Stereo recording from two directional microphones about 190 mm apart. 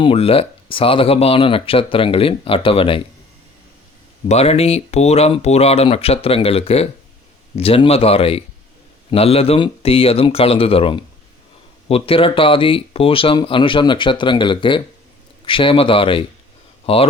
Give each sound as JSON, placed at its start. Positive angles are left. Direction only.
{"t": 0.0, "sound": "speech", "side_deg": 30}
{"t": 4.3, "sound": "speech", "side_deg": 30}